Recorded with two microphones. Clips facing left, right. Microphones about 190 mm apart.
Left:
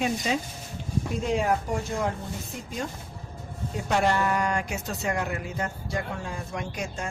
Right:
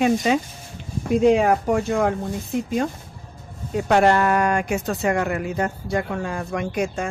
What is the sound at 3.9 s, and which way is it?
Speech, 70° right (ahead or behind).